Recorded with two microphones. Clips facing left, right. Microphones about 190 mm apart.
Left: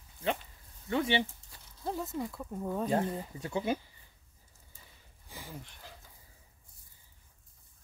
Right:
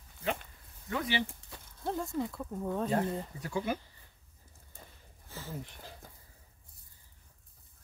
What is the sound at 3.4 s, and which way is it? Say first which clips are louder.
Speech: left 3 dB; 25° left (ahead or behind).